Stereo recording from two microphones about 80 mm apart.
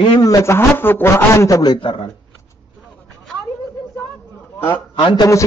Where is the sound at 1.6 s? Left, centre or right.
Left.